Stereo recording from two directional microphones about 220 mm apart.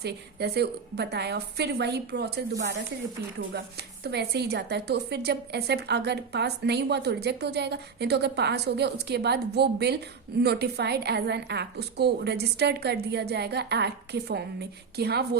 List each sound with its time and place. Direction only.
0.0 s a woman's voice: 50° right (ahead or behind)
4.0 s a woman's voice: 50° right (ahead or behind)